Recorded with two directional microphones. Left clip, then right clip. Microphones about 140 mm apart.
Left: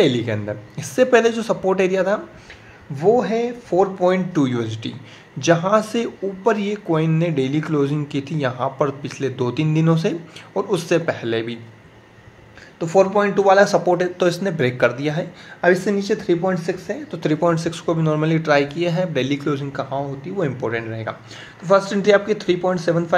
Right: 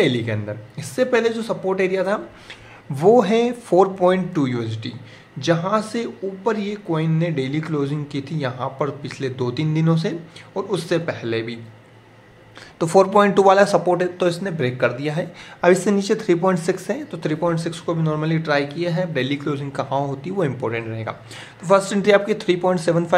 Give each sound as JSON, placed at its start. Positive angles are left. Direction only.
{"t": 0.0, "sound": "a man's voice", "side_deg": 5}
{"t": 3.0, "sound": "speech", "side_deg": -35}
{"t": 4.3, "sound": "a man's voice", "side_deg": 0}
{"t": 12.7, "sound": "speech", "side_deg": -40}
{"t": 13.6, "sound": "speech", "side_deg": -10}
{"t": 15.6, "sound": "speech", "side_deg": -20}
{"t": 17.1, "sound": "a man's voice", "side_deg": 10}
{"t": 19.7, "sound": "speech", "side_deg": -15}
{"t": 20.0, "sound": "speech", "side_deg": -35}
{"t": 20.3, "sound": "speech", "side_deg": -10}